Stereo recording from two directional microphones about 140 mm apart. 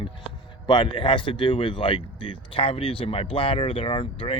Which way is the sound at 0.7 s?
35° left (ahead or behind).